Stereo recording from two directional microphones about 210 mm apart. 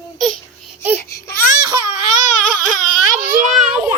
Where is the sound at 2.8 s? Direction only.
40° left (ahead or behind).